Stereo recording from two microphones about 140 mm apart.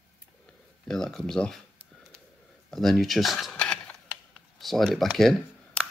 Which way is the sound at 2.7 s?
Centre (ahead or behind).